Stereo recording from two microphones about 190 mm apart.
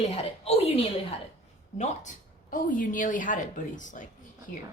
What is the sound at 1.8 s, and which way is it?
A woman's voice, 45° left (ahead or behind).